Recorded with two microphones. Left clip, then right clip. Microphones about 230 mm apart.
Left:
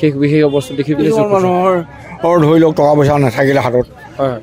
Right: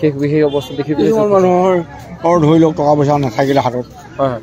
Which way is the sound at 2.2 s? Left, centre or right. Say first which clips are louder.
Left 1 dB; left.